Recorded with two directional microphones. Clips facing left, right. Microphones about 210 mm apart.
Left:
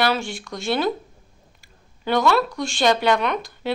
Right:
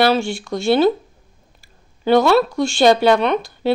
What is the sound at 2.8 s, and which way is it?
Speech, 30° right (ahead or behind).